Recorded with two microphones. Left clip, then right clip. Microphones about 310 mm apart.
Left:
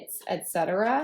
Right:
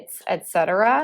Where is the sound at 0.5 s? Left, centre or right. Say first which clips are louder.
Right 7 dB; centre.